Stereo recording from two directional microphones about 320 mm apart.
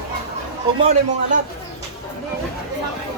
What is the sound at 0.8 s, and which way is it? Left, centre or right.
Speech, right.